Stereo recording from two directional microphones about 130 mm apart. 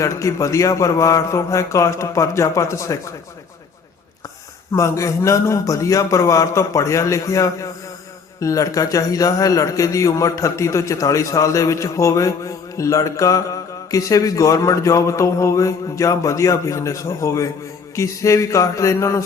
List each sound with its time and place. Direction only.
0.0 s a man's voice: 25° left (ahead or behind)
4.7 s a man's voice: 25° left (ahead or behind)